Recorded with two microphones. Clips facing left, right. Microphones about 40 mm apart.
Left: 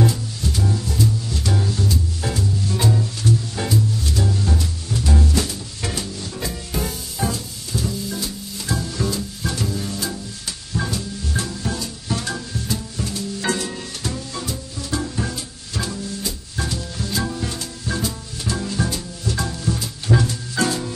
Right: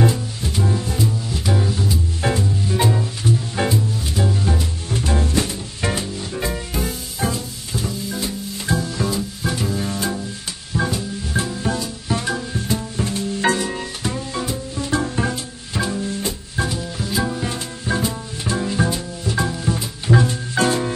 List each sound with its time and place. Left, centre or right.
0.0 s music: right
2.2 s music: right
4.8 s music: right
8.7 s music: centre
9.7 s music: right
10.7 s music: centre
20.5 s music: right